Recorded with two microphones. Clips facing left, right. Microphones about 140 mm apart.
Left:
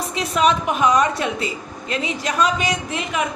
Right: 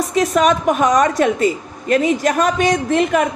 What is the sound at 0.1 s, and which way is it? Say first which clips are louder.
Speech: right 3 dB; 45° right (ahead or behind).